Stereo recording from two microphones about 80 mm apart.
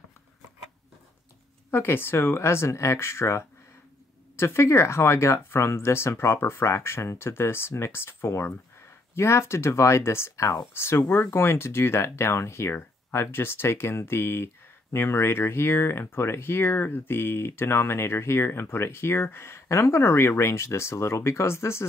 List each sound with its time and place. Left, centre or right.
1.7 s speech: left